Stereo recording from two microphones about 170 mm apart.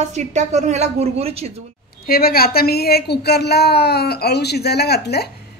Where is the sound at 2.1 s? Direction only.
60° left (ahead or behind).